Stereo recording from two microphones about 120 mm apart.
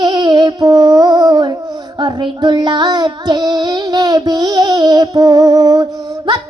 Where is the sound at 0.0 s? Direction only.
40° right (ahead or behind).